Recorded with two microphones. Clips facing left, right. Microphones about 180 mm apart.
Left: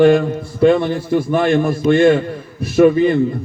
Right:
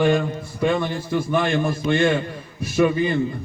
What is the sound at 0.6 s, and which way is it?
A man's voice, 45° left (ahead or behind).